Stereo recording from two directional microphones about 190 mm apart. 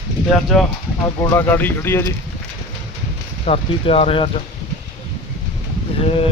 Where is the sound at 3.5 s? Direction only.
30° left (ahead or behind).